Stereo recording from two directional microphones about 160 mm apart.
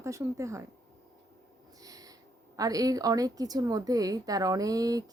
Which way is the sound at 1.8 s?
20° right (ahead or behind).